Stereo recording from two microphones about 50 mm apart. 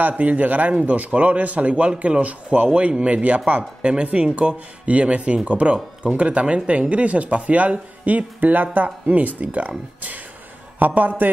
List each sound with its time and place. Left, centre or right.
0.2 s speech: right
11.0 s speech: right